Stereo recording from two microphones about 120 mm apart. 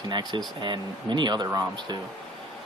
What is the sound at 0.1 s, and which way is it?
Speech, 40° right (ahead or behind).